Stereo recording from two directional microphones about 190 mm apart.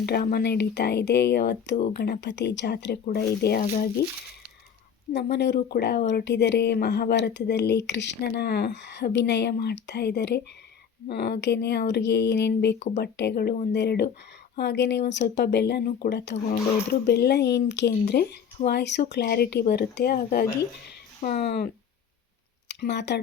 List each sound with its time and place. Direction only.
0.0 s speech: 55° left (ahead or behind)
5.1 s speech: 65° left (ahead or behind)
13.7 s speech: 60° left (ahead or behind)
16.3 s speech: 35° left (ahead or behind)
16.9 s speech: 55° left (ahead or behind); by 21.4 s 40° left (ahead or behind)
21.4 s speech: 60° left (ahead or behind)
22.7 s speech: 65° left (ahead or behind)